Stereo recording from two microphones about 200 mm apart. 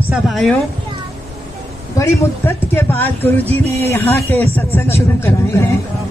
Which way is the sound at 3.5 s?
30° right (ahead or behind).